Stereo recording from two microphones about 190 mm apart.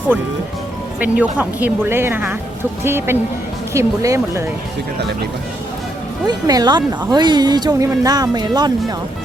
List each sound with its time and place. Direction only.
0.9 s speech: 5° right (ahead or behind)
6.2 s speech: 20° right (ahead or behind)